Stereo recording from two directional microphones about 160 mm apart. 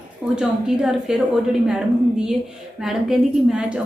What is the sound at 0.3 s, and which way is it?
A woman's voice, 5° right (ahead or behind).